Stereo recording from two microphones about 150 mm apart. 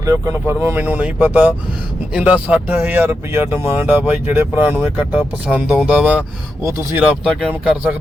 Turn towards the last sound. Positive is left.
turn(degrees=-10)  # may be behind; listen again after turning